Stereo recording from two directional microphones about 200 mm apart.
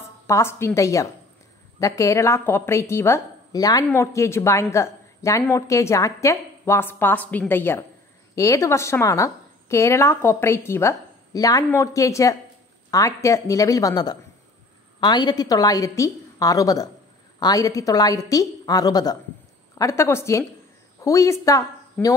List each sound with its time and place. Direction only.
0.3 s a woman's voice: 15° left (ahead or behind)